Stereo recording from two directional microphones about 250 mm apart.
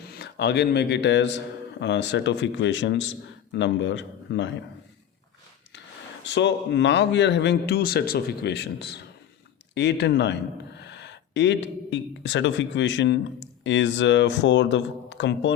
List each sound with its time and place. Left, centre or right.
0.1 s a man's voice: left
6.2 s a man's voice: left